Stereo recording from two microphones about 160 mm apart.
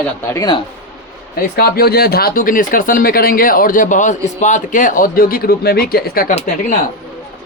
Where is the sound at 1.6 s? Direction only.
75° left (ahead or behind).